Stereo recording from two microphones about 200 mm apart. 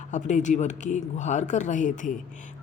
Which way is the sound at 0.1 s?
35° left (ahead or behind).